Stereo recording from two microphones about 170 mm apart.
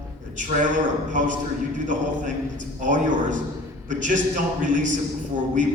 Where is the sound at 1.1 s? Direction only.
50° right (ahead or behind).